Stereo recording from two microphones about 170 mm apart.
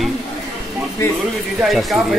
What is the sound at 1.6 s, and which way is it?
Speech, centre (ahead or behind).